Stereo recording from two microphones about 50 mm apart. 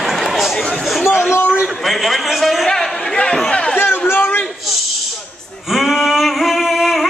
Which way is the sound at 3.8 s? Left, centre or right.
Left.